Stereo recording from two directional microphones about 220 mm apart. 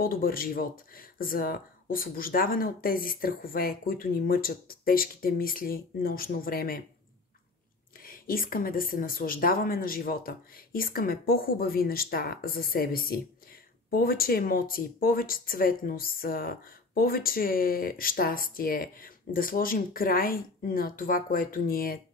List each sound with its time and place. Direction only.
0.0 s speech: 40° left (ahead or behind)
8.0 s speech: 40° left (ahead or behind)